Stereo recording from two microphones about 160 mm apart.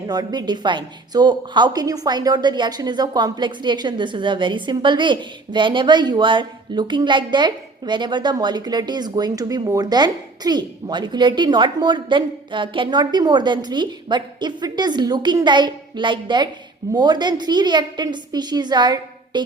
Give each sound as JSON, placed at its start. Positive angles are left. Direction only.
{"t": 0.1, "sound": "a woman's voice", "side_deg": -25}